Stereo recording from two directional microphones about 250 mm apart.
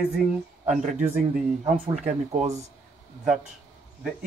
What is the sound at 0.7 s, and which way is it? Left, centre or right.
Speech, right.